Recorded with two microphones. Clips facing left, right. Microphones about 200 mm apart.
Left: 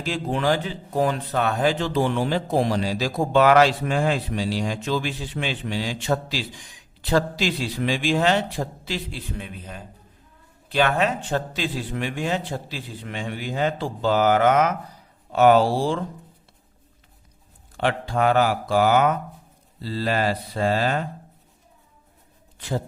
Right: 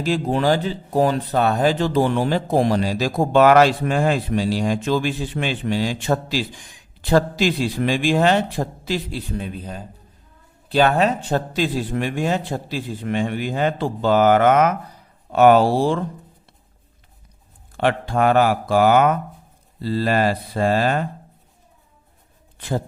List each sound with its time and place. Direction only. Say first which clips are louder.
0.0 s speech: right 5 dB; 40° right (ahead or behind)
9.4 s a man's voice: right 6 dB; 35° right (ahead or behind); by 16.0 s 55° right (ahead or behind)
17.7 s speech: right 3 dB; 55° right (ahead or behind)